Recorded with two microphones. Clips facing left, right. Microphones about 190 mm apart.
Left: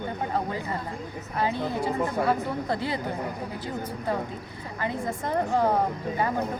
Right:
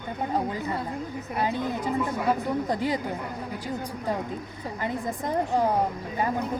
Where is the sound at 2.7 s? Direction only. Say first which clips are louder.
Right 2 dB; 15° right (ahead or behind).